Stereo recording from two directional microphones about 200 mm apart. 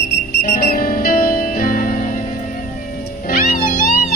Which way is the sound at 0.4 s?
50° left (ahead or behind).